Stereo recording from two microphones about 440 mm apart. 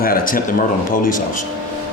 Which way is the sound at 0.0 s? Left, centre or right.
Centre.